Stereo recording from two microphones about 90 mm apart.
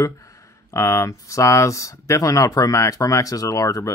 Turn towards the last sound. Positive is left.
turn(degrees=45)  # may be behind; listen again after turning